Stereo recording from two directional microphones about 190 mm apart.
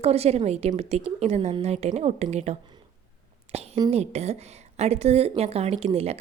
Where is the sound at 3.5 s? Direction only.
35° right (ahead or behind).